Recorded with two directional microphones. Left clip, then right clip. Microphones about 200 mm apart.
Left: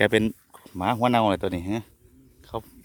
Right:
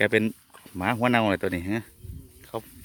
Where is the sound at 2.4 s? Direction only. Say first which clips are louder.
Left 1 dB; 15° left (ahead or behind).